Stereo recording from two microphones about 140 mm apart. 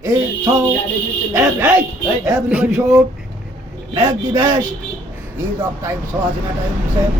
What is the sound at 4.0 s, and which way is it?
Speech, 20° right (ahead or behind).